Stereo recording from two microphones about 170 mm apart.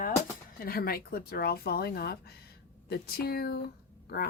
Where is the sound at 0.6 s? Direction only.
60° left (ahead or behind).